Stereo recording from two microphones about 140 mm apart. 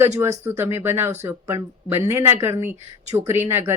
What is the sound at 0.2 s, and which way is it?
Speech, 15° right (ahead or behind).